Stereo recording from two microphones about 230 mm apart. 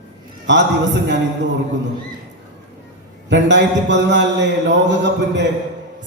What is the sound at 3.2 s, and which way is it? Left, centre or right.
A man's voice, right.